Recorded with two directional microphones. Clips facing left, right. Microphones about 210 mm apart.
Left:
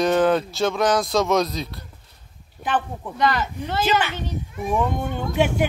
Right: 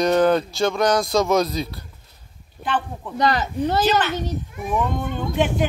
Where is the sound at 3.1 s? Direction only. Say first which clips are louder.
Right 2 dB; 40° right (ahead or behind).